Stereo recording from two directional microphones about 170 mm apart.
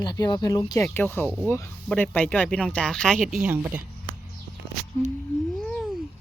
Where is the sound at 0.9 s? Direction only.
10° left (ahead or behind); by 3.8 s 10° right (ahead or behind).